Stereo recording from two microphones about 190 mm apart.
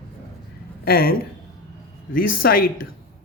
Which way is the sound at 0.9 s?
50° left (ahead or behind).